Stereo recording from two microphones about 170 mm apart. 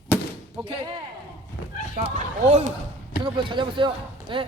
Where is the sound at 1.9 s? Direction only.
40° right (ahead or behind).